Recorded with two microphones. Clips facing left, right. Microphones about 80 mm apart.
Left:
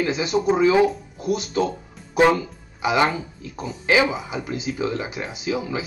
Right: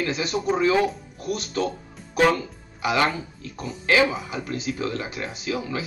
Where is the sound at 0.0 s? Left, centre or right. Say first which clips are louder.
Left 4 dB; centre.